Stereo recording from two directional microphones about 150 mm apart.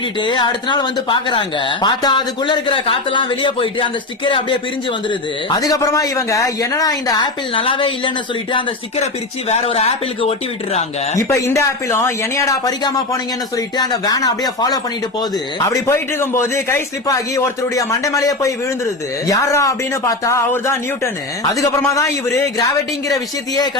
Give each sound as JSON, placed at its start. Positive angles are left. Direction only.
{"t": 0.2, "sound": "a man's voice", "side_deg": 30}
{"t": 9.5, "sound": "speech", "side_deg": 40}
{"t": 11.2, "sound": "a man's voice", "side_deg": 20}